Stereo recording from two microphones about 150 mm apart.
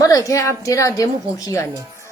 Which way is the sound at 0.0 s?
20° left (ahead or behind).